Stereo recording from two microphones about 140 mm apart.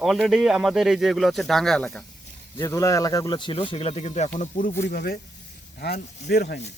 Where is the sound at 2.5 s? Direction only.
25° left (ahead or behind); by 4.2 s 50° left (ahead or behind).